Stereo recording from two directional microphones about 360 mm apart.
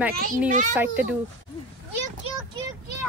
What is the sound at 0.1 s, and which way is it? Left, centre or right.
Speech, right.